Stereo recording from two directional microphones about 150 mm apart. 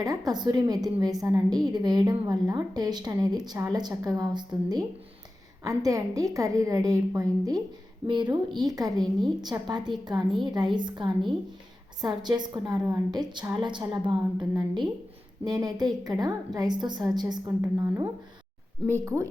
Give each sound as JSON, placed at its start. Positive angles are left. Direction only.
{"t": 0.0, "sound": "a woman's voice", "side_deg": -25}